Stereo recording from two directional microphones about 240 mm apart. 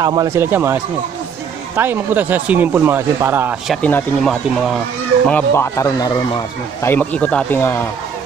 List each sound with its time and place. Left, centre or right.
0.0 s speech: centre
1.8 s speech: centre